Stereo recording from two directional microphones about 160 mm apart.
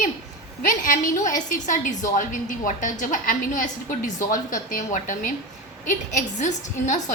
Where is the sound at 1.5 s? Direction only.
50° left (ahead or behind).